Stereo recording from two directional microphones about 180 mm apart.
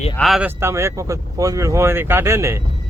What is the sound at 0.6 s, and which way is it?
Speech, 15° right (ahead or behind).